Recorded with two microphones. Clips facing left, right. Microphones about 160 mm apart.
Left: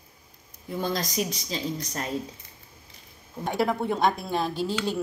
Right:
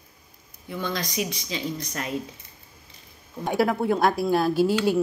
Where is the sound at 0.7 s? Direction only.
40° left (ahead or behind).